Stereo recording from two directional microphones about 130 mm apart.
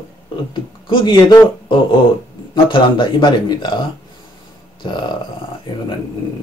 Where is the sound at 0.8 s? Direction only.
35° left (ahead or behind).